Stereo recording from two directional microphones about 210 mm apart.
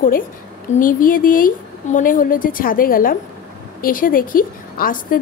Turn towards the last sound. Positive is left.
turn(degrees=40)  # may be behind; listen again after turning